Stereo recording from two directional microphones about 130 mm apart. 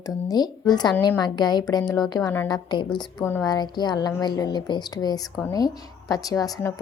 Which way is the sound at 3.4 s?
30° left (ahead or behind).